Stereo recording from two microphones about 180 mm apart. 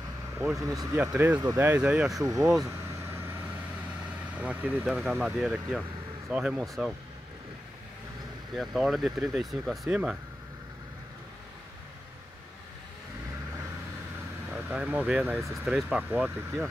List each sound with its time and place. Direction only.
0.6 s speech: 20° right (ahead or behind)
2.2 s speech: 20° right (ahead or behind)
2.6 s vehicle: 15° right (ahead or behind)
4.4 s speech: 10° right (ahead or behind)
8.5 s speech: centre (ahead or behind)
14.5 s speech: 10° right (ahead or behind)